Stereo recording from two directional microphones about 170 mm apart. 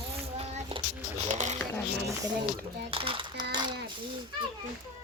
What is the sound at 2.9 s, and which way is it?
Speech, 30° right (ahead or behind).